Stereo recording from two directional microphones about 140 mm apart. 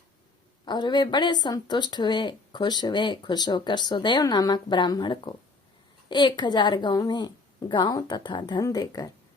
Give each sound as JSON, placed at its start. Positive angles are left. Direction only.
{"t": 0.6, "sound": "a woman's voice", "side_deg": 30}